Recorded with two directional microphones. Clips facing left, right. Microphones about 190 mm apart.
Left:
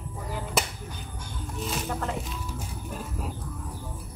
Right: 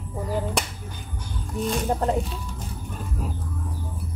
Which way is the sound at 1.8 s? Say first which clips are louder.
Right 9 dB; 35° right (ahead or behind).